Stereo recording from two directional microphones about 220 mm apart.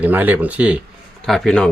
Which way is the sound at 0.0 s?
10° right (ahead or behind).